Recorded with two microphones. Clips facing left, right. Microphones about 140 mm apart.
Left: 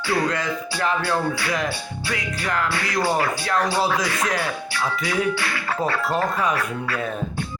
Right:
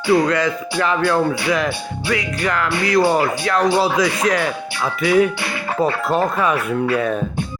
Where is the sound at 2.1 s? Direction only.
90° right.